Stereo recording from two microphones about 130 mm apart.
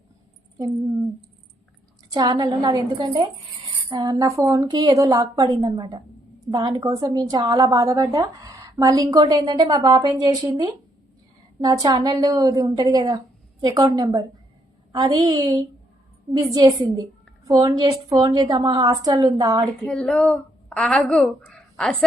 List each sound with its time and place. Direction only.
2.1 s a woman's voice: 35° right (ahead or behind)
19.8 s a woman's voice: 5° left (ahead or behind)